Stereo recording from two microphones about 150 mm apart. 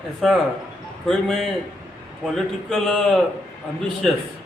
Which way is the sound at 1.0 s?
5° left (ahead or behind).